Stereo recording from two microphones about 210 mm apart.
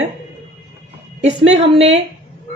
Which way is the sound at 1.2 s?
30° right (ahead or behind).